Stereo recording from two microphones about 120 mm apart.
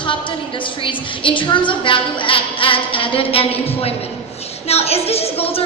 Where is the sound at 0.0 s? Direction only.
45° left (ahead or behind).